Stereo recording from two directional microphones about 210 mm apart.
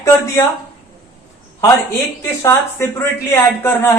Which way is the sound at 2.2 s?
15° left (ahead or behind).